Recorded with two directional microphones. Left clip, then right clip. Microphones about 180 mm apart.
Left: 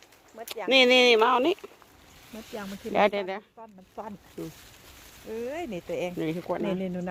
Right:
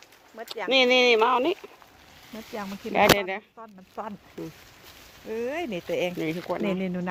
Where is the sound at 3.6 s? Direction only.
50° right (ahead or behind).